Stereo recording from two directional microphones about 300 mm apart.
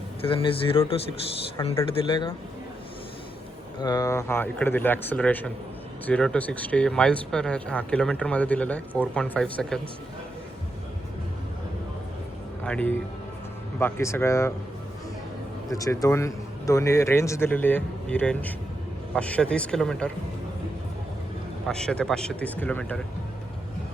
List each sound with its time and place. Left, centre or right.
0.2 s a man's voice: centre
3.8 s a man's voice: centre
12.6 s a man's voice: centre
15.7 s a man's voice: centre
21.7 s speech: centre